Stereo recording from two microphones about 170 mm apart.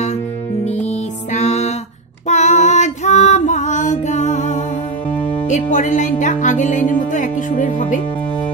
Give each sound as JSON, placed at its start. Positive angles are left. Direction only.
{"t": 0.7, "sound": "music", "side_deg": 45}
{"t": 5.5, "sound": "speech", "side_deg": 45}